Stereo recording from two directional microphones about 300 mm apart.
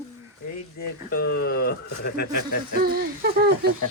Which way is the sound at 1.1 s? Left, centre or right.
Left.